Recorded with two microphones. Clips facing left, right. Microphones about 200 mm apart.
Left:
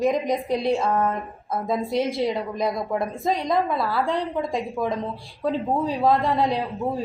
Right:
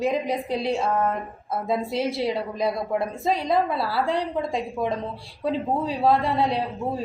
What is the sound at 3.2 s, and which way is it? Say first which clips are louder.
Speech: even; 5° right (ahead or behind).